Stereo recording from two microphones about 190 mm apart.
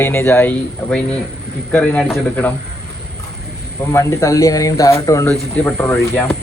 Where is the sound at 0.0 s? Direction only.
10° left (ahead or behind).